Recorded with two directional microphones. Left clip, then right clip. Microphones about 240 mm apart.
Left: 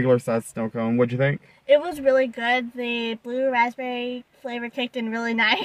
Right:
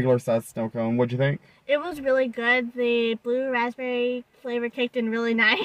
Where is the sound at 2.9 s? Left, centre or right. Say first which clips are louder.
Right 1 dB; centre.